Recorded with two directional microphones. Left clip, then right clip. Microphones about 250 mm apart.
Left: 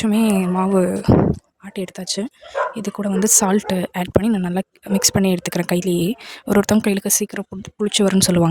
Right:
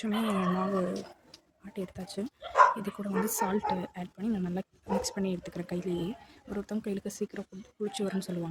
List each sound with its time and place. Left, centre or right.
0.0 s speech: left